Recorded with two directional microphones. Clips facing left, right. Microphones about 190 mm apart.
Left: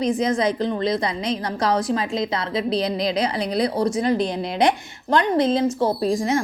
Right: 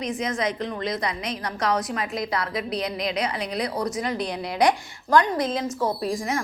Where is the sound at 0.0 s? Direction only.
30° left (ahead or behind).